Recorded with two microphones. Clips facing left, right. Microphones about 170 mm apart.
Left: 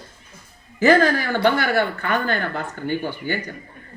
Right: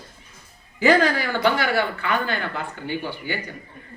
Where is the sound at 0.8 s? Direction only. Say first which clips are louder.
Left 2 dB; 45° left (ahead or behind).